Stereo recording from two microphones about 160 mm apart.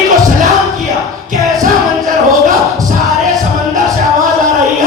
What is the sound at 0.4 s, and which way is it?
Music, centre (ahead or behind).